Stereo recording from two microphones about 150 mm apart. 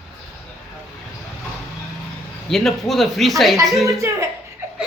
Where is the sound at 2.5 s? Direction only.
Centre (ahead or behind).